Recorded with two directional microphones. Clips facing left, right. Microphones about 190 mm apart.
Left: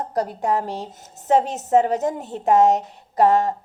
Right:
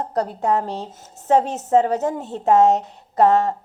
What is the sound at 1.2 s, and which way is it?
Speech, 20° left (ahead or behind).